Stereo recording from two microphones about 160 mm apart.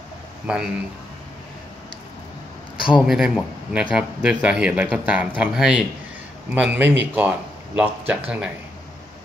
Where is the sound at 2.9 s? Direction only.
5° right (ahead or behind).